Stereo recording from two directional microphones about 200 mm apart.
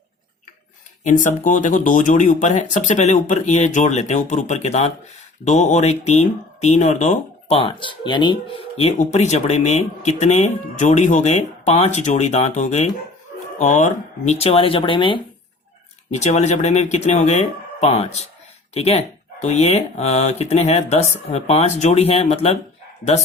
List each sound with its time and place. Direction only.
1.0 s speech: 40° left (ahead or behind)